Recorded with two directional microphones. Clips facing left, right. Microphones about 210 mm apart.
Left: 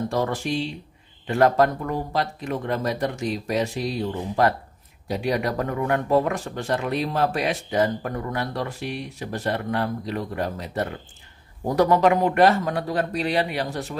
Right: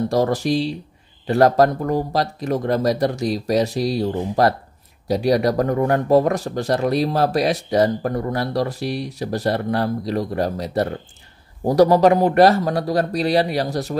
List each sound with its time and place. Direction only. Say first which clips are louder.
0.1 s speech: right 6 dB; 40° right (ahead or behind)